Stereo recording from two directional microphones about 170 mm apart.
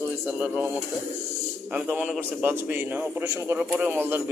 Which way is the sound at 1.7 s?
5° right (ahead or behind).